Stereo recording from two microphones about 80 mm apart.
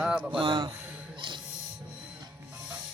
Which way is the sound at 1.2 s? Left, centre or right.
Right.